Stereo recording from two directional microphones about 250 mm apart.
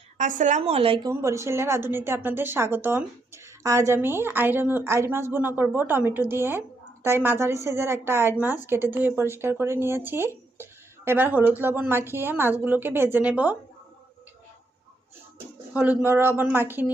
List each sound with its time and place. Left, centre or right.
0.2 s a woman's voice: right; by 13.6 s centre
15.7 s a woman's voice: centre